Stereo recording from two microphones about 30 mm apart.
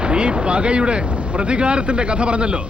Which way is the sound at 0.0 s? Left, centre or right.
Right.